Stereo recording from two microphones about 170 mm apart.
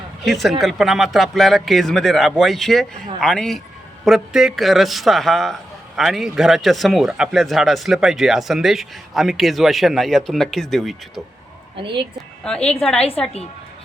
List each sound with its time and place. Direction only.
0.3 s speech: centre (ahead or behind)
11.8 s speech: 30° right (ahead or behind)
12.5 s speech: 5° left (ahead or behind)